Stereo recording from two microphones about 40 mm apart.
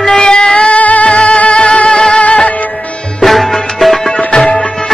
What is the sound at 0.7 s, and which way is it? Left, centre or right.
Music, left.